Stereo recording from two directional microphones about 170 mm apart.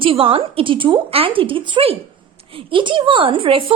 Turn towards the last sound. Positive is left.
turn(degrees=-30)  # may be behind; listen again after turning